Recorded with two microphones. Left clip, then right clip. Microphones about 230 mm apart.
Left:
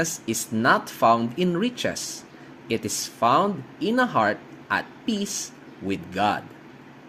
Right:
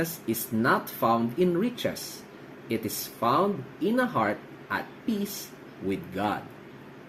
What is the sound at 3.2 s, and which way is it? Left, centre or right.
Speech, left.